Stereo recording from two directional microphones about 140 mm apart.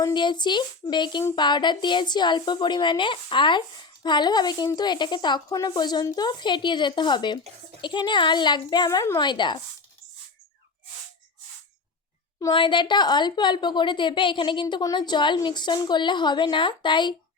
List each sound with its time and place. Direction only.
0.0 s a woman's voice: 30° left (ahead or behind)
12.4 s a woman's voice: 30° left (ahead or behind)